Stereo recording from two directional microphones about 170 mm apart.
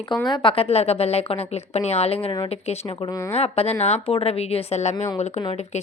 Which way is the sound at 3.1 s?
15° left (ahead or behind).